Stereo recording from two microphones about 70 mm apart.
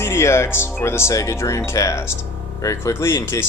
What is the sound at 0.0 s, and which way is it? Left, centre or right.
Speech, left.